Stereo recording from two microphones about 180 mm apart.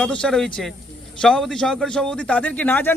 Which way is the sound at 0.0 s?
5° left (ahead or behind).